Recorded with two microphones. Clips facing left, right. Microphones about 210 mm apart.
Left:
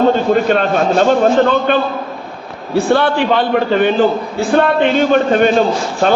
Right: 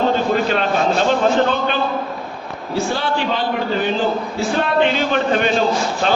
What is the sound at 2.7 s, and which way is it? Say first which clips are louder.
A man's voice: left 8 dB; 60° left (ahead or behind).